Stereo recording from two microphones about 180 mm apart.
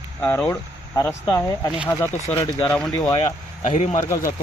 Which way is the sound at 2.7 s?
5° left (ahead or behind).